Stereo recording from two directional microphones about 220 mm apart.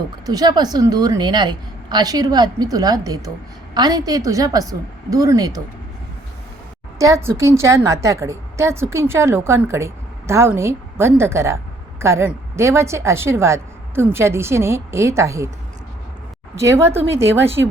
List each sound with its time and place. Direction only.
0.3 s a woman's voice: 20° right (ahead or behind)
7.0 s a woman's voice: 15° right (ahead or behind)
16.6 s a woman's voice: 10° right (ahead or behind)